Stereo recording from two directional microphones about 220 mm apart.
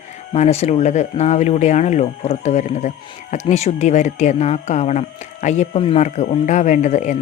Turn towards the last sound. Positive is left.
turn(degrees=30)  # may be behind; listen again after turning